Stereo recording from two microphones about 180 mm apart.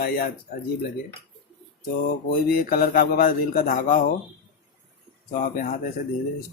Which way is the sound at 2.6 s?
55° left (ahead or behind).